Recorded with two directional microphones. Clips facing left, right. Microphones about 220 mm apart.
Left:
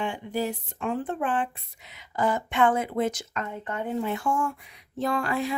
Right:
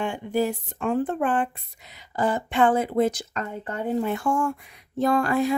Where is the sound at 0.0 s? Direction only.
50° right (ahead or behind).